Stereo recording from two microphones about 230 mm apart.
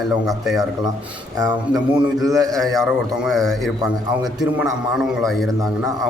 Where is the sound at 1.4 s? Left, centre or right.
Centre.